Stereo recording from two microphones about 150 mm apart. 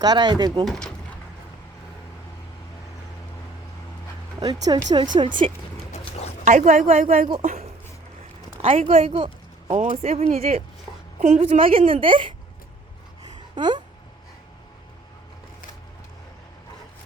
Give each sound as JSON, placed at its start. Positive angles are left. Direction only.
{"t": 0.0, "sound": "speech", "side_deg": -30}
{"t": 0.6, "sound": "speech", "side_deg": 5}
{"t": 4.4, "sound": "speech", "side_deg": -25}
{"t": 5.9, "sound": "dog", "side_deg": 45}
{"t": 6.4, "sound": "a woman's voice", "side_deg": -55}
{"t": 8.8, "sound": "speech", "side_deg": -40}
{"t": 9.7, "sound": "a child's voice", "side_deg": -55}
{"t": 13.2, "sound": "a sound", "side_deg": -30}